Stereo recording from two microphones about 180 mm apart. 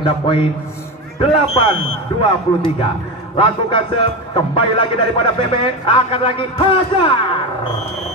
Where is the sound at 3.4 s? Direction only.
25° left (ahead or behind).